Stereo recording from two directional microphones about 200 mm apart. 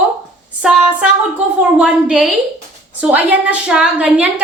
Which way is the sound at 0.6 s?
5° right (ahead or behind).